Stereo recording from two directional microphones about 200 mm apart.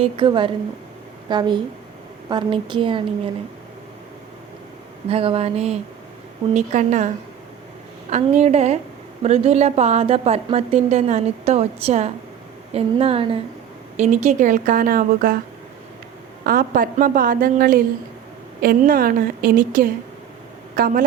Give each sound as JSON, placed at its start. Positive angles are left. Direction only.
{"t": 0.0, "sound": "a woman's voice", "side_deg": -25}
{"t": 5.0, "sound": "a woman's voice", "side_deg": -30}
{"t": 8.1, "sound": "a woman's voice", "side_deg": -35}
{"t": 16.4, "sound": "a woman's voice", "side_deg": -45}